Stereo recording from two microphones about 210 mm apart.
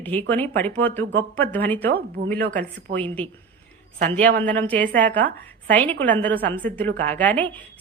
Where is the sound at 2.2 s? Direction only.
45° right (ahead or behind).